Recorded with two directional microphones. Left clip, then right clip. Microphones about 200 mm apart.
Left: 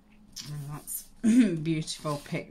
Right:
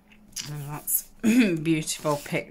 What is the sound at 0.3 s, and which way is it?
Speech, 20° right (ahead or behind).